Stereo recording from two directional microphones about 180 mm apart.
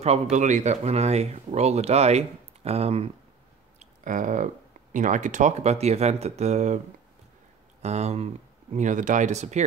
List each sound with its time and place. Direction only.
0.0 s speech: 40° right (ahead or behind)
3.8 s speech: 45° right (ahead or behind)
7.8 s speech: 40° right (ahead or behind)